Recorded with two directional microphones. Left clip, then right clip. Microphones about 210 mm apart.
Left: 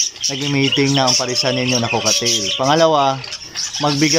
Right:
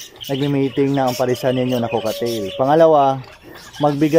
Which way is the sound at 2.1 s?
10° left (ahead or behind).